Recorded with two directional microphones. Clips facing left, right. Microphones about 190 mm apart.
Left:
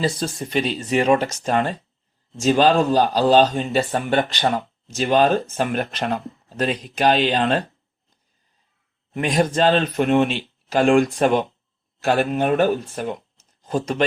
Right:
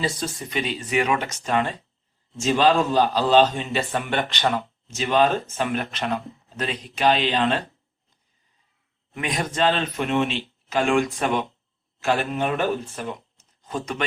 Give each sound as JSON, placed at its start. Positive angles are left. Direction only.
{"t": 0.0, "sound": "a man's voice", "side_deg": 35}
{"t": 9.1, "sound": "a man's voice", "side_deg": 35}
{"t": 13.6, "sound": "speech", "side_deg": 35}